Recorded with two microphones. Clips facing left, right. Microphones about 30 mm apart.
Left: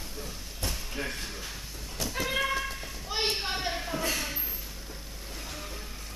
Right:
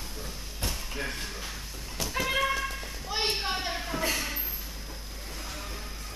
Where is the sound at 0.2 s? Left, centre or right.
Centre.